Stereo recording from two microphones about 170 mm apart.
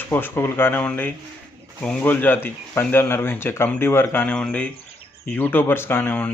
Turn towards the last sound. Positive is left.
turn(degrees=10)  # may be behind; listen again after turning